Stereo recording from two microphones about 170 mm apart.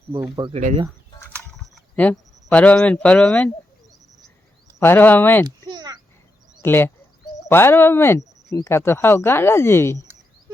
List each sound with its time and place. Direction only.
0.1 s speech: 15° right (ahead or behind)
1.7 s speech: 10° left (ahead or behind)
4.8 s speech: 10° left (ahead or behind)
5.6 s a sound: 25° right (ahead or behind)
6.7 s speech: 15° left (ahead or behind)